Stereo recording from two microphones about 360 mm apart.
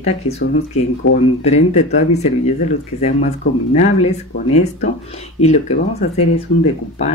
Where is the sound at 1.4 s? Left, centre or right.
Centre.